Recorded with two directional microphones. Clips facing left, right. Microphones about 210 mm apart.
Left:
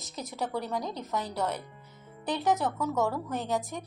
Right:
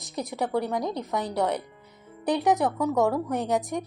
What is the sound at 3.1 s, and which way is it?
Speech, 65° right (ahead or behind).